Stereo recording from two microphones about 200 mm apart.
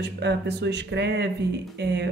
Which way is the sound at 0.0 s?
60° right (ahead or behind).